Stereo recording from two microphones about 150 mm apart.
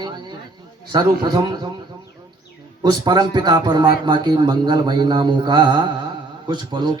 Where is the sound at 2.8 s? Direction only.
25° right (ahead or behind).